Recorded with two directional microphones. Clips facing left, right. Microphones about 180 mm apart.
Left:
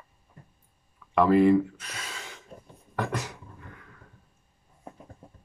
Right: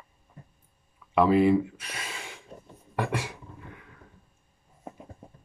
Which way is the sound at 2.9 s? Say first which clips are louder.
Right 1 dB; 10° right (ahead or behind).